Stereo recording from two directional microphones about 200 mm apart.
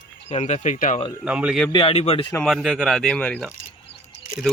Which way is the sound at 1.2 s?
5° right (ahead or behind).